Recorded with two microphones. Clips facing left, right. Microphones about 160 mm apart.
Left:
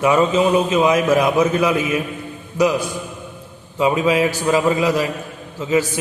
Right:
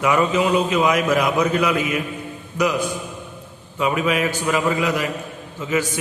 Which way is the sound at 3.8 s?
25° left (ahead or behind).